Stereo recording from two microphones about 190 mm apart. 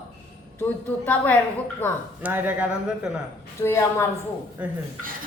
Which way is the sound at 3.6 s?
15° left (ahead or behind).